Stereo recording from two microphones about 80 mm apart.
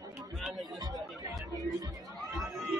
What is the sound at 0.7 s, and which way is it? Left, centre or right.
Music, right.